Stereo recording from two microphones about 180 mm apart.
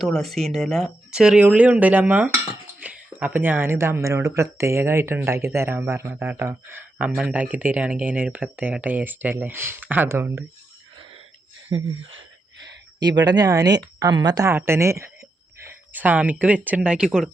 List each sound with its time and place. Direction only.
0.0 s speech: centre (ahead or behind); by 10.4 s 15° right (ahead or behind)
11.7 s a sound: 85° right
13.0 s speech: 20° right (ahead or behind); by 17.2 s 5° right (ahead or behind)